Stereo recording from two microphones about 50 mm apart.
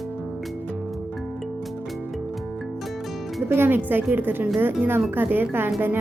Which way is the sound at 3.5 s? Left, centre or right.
Right.